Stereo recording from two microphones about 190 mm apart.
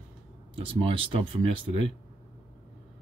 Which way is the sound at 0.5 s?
30° right (ahead or behind).